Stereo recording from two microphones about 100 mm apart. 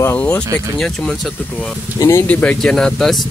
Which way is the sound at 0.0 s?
20° left (ahead or behind).